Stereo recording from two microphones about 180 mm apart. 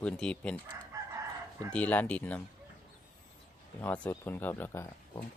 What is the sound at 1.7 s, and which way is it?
Speech, 10° left (ahead or behind).